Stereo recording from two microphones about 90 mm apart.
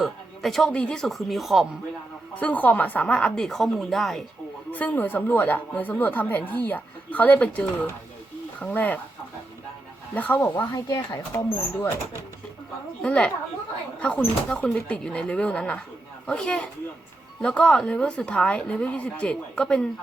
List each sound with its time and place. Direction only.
0.0 s speech: centre (ahead or behind)
2.3 s a woman's voice: 15° left (ahead or behind); by 4.2 s centre (ahead or behind)
4.7 s speech: 20° left (ahead or behind)
10.2 s speech: 20° left (ahead or behind)
10.7 s speech: 40° left (ahead or behind)
13.0 s a woman's voice: 10° left (ahead or behind)
14.5 s a woman's voice: 15° left (ahead or behind)